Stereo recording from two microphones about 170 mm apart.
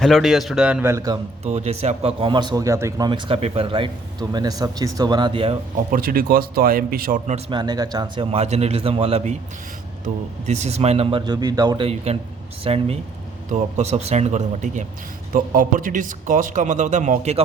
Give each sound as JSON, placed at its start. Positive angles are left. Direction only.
{"t": 0.0, "sound": "a man's voice", "side_deg": 0}
{"t": 1.5, "sound": "a man's voice", "side_deg": -40}
{"t": 3.1, "sound": "a man's voice", "side_deg": -30}
{"t": 5.9, "sound": "speech", "side_deg": -60}
{"t": 7.5, "sound": "a man's voice", "side_deg": -25}
{"t": 10.4, "sound": "a man's voice", "side_deg": -40}
{"t": 12.6, "sound": "a man's voice", "side_deg": -35}